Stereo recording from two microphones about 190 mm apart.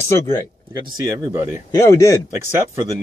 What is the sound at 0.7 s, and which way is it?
Speech, 15° right (ahead or behind).